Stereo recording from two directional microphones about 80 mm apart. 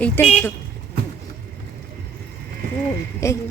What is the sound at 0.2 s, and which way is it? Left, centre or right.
Speech, left.